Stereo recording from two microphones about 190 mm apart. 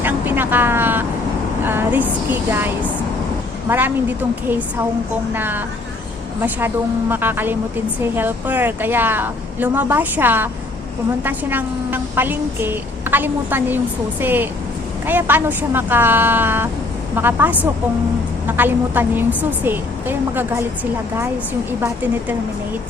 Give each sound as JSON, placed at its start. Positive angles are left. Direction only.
{"t": 0.0, "sound": "vehicle", "side_deg": -10}
{"t": 1.6, "sound": "a woman's voice", "side_deg": -10}
{"t": 7.1, "sound": "a woman's voice", "side_deg": -10}
{"t": 21.8, "sound": "a woman's voice", "side_deg": -10}